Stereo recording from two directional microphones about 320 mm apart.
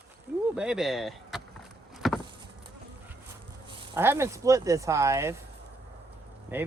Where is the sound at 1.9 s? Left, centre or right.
Centre.